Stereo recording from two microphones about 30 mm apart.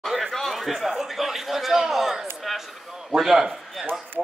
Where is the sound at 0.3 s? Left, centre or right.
Centre.